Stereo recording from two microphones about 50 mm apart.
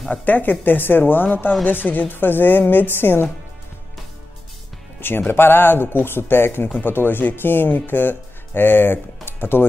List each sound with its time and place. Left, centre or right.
0.1 s speech: left
5.3 s speech: left